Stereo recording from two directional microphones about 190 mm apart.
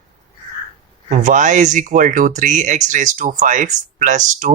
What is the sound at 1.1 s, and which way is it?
Speech, 40° right (ahead or behind).